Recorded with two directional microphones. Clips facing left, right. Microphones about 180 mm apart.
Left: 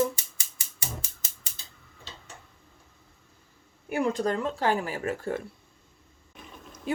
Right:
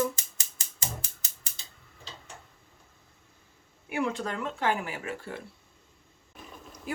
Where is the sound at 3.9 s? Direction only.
40° left (ahead or behind).